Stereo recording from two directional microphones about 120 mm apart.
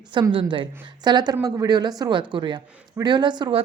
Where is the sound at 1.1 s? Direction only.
35° right (ahead or behind).